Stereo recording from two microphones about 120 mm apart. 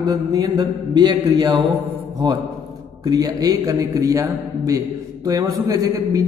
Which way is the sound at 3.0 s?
35° right (ahead or behind).